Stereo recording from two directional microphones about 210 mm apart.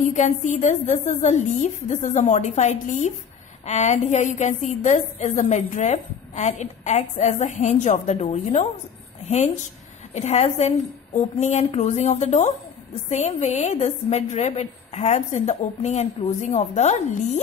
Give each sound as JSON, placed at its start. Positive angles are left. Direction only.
{"t": 0.0, "sound": "a woman's voice", "side_deg": 35}
{"t": 10.1, "sound": "a woman's voice", "side_deg": 35}